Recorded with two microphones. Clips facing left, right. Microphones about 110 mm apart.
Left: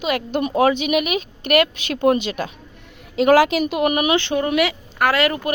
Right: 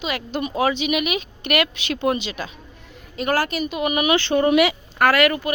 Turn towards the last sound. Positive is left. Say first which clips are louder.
# right 1 dB
turn(degrees=30)  # may be behind; listen again after turning